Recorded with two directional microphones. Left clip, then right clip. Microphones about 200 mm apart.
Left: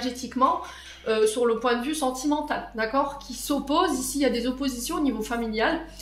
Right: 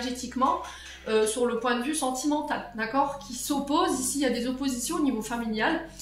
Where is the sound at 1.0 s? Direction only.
50° left (ahead or behind).